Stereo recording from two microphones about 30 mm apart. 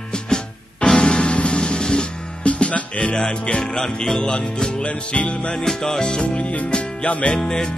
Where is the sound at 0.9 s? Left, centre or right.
Left.